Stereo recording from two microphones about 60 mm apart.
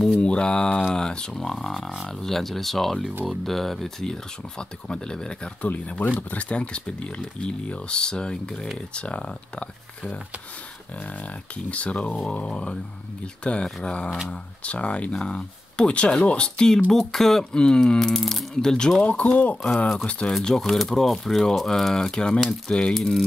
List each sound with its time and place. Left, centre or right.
0.2 s speech: centre
11.7 s speech: centre
19.1 s speech: left
20.3 s speech: centre